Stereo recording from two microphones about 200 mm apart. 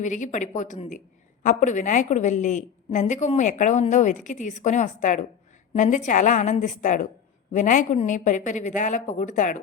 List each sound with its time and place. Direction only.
0.0 s a woman's voice: 40° left (ahead or behind)